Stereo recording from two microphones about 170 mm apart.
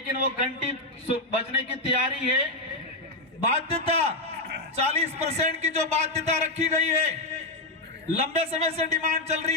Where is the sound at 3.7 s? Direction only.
40° right (ahead or behind).